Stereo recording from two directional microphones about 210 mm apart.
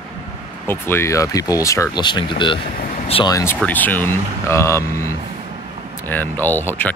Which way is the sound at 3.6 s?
10° left (ahead or behind).